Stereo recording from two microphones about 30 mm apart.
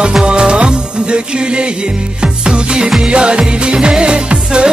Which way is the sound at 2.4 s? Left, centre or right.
Right.